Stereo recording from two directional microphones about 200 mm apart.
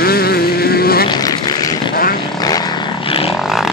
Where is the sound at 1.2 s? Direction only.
20° left (ahead or behind).